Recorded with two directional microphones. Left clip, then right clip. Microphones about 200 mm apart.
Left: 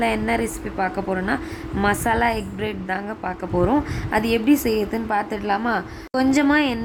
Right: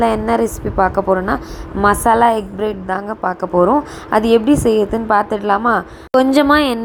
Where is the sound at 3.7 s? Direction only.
15° right (ahead or behind).